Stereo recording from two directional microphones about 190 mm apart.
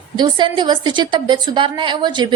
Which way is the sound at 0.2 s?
25° right (ahead or behind).